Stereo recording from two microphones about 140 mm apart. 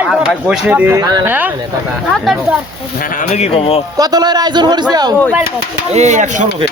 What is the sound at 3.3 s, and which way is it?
Speech, 45° left (ahead or behind).